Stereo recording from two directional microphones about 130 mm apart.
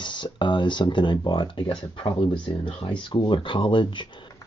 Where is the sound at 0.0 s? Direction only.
35° left (ahead or behind).